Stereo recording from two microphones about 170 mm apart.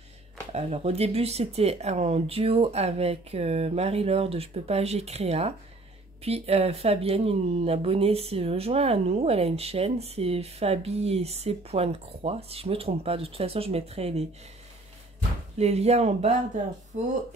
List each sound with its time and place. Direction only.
0.5 s speech: 35° right (ahead or behind)
15.5 s speech: 40° right (ahead or behind)